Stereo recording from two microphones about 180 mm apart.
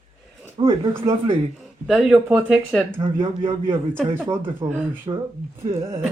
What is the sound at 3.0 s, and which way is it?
A man's voice, 30° right (ahead or behind).